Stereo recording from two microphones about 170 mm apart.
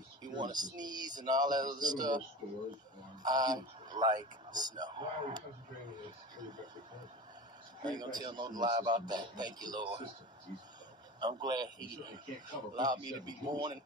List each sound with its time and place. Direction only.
0.2 s a sound: 25° right (ahead or behind)
0.7 s a man's voice: 25° right (ahead or behind)
7.8 s a man's voice: 25° right (ahead or behind)
11.1 s a man's voice: 25° right (ahead or behind)